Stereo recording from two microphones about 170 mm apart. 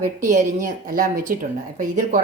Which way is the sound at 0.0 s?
45° right (ahead or behind).